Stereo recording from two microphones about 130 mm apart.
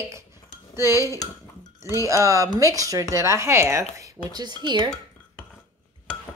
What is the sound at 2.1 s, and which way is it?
Speech, 25° right (ahead or behind).